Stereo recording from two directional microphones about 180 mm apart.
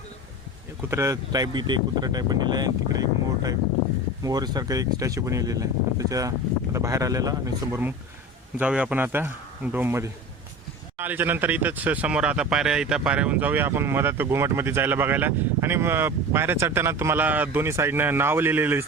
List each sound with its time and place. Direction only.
0.8 s speech: 15° right (ahead or behind)